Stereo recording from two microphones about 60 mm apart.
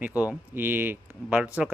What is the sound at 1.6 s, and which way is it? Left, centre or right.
Speech, centre.